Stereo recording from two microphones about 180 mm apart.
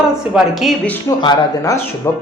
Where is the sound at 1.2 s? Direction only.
20° left (ahead or behind).